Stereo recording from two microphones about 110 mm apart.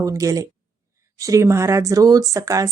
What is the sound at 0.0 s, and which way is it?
Speech, 30° right (ahead or behind).